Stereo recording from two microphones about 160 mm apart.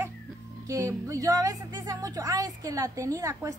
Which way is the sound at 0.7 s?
20° right (ahead or behind).